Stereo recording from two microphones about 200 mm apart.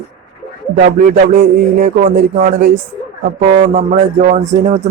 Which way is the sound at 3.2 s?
45° right (ahead or behind).